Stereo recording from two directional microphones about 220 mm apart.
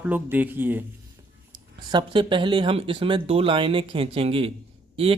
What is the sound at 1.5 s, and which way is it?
Speech, 20° right (ahead or behind).